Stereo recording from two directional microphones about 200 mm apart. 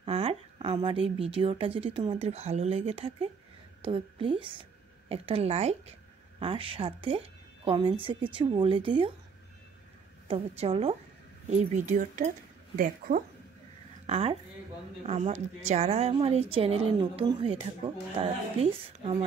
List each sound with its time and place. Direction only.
0.0 s a woman's voice: 30° right (ahead or behind)
10.2 s a woman's voice: 30° right (ahead or behind); by 13.2 s 45° right (ahead or behind)
14.0 s a woman's voice: 30° right (ahead or behind)